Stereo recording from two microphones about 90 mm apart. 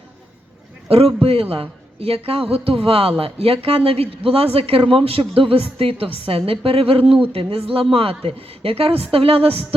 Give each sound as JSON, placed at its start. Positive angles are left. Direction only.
{"t": 0.9, "sound": "a woman's voice", "side_deg": -90}